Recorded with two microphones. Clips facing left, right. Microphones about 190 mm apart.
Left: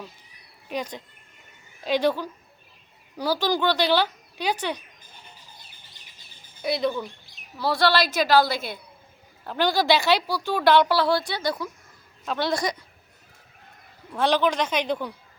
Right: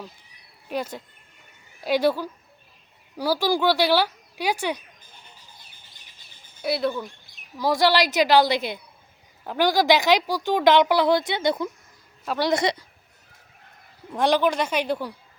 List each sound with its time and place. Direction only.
0.7 s speech: 10° right (ahead or behind)
6.6 s speech: 5° right (ahead or behind)
7.6 s speech: 15° right (ahead or behind)
12.2 s speech: 10° right (ahead or behind)
12.5 s a woman's voice: 25° right (ahead or behind)
14.1 s speech: 15° right (ahead or behind)